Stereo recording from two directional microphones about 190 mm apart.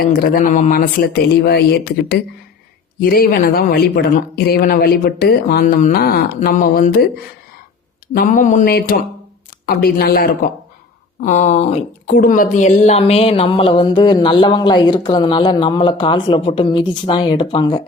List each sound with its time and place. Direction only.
0.0 s speech: 50° left (ahead or behind)
8.0 s speech: 50° left (ahead or behind); by 17.8 s 25° left (ahead or behind)